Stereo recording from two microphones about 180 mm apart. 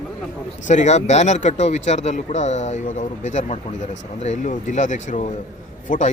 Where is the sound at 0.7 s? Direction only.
40° left (ahead or behind).